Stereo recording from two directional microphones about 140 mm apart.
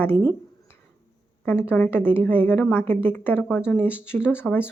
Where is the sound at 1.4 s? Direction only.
15° left (ahead or behind).